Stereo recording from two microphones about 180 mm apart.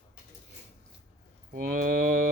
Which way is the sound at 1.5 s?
50° right (ahead or behind).